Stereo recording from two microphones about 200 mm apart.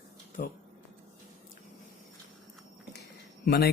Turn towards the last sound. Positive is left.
turn(degrees=55)  # may be behind; listen again after turning